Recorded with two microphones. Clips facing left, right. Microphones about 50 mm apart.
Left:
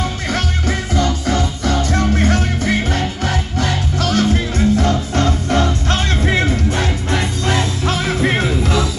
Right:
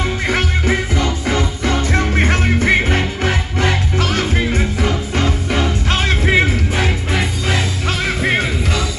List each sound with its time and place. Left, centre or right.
0.3 s music: right; by 8.8 s centre